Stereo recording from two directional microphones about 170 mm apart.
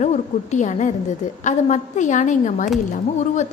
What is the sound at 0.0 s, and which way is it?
A woman's voice, 45° left (ahead or behind).